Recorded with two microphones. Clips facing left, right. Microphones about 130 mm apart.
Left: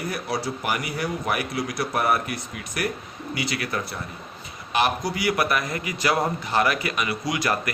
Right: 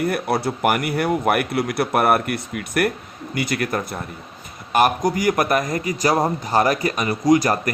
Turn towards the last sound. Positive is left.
turn(degrees=-40)  # may be behind; listen again after turning